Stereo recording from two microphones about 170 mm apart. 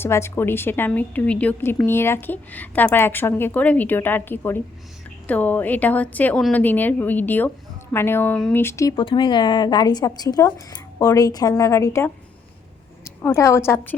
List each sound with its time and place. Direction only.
0.0 s a woman's voice: 15° left (ahead or behind)
8.6 s a woman's voice: 20° left (ahead or behind)